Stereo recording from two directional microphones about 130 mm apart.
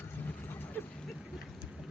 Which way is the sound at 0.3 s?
15° left (ahead or behind).